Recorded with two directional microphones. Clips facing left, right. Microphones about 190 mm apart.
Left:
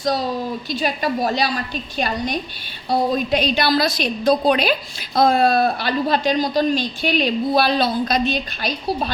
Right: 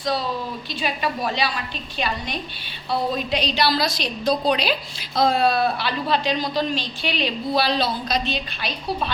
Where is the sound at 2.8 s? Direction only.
45° left (ahead or behind).